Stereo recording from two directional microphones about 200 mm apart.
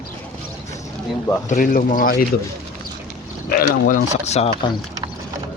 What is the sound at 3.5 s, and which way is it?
Speech, 45° left (ahead or behind).